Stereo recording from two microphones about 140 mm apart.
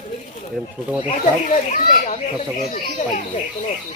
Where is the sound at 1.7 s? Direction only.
60° left (ahead or behind).